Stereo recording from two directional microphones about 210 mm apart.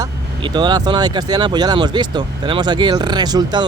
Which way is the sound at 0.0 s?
20° right (ahead or behind).